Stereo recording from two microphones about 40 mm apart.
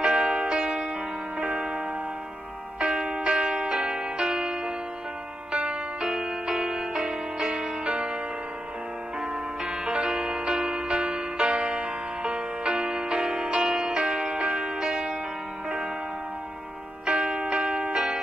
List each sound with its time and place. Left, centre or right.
0.0 s music: centre
3.1 s music: right
9.2 s music: centre
17.0 s music: right